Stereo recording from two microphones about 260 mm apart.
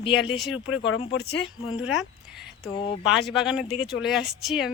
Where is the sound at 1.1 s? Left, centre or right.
Left.